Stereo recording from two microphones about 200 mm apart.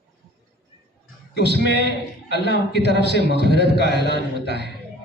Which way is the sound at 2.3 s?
55° left (ahead or behind).